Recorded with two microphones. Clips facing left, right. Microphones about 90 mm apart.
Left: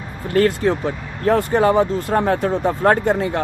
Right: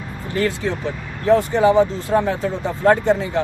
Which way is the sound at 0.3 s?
50° left (ahead or behind).